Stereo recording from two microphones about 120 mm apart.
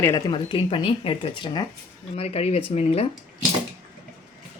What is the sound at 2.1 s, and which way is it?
Speech, 60° left (ahead or behind).